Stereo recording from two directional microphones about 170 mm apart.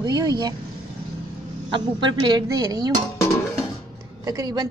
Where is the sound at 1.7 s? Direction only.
25° right (ahead or behind).